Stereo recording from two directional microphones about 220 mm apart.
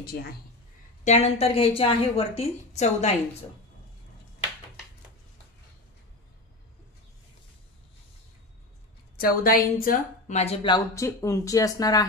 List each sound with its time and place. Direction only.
0.0 s speech: 45° left (ahead or behind)
1.0 s a woman's voice: 30° left (ahead or behind)
9.1 s a woman's voice: 40° left (ahead or behind); by 12.1 s 15° left (ahead or behind)